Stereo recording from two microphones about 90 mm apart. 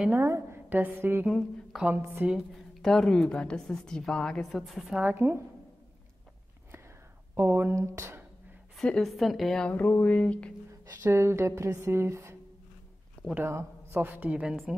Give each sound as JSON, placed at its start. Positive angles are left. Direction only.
{"t": 0.1, "sound": "speech", "side_deg": -30}
{"t": 1.7, "sound": "speech", "side_deg": -5}
{"t": 2.2, "sound": "speech", "side_deg": -20}
{"t": 2.8, "sound": "a woman's voice", "side_deg": 5}
{"t": 4.9, "sound": "speech", "side_deg": -20}
{"t": 7.3, "sound": "speech", "side_deg": -25}
{"t": 8.7, "sound": "speech", "side_deg": 5}
{"t": 9.7, "sound": "a woman's voice", "side_deg": 20}
{"t": 10.9, "sound": "speech", "side_deg": -25}